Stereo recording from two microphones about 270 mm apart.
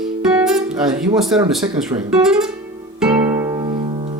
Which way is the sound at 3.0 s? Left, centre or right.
Centre.